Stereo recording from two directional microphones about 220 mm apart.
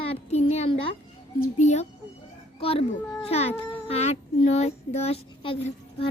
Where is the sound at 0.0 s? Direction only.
25° left (ahead or behind).